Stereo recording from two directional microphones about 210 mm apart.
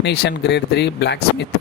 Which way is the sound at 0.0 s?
55° left (ahead or behind).